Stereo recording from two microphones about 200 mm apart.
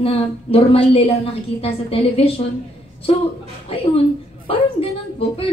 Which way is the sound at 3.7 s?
30° left (ahead or behind).